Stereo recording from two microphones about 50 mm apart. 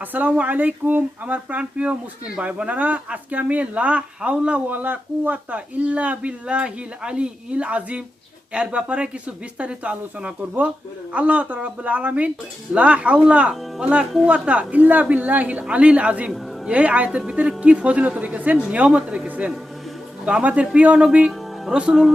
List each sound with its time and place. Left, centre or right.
0.0 s speech: right
15.6 s speech: right